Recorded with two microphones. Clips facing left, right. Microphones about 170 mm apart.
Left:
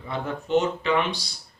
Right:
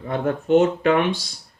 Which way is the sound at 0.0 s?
50° right (ahead or behind).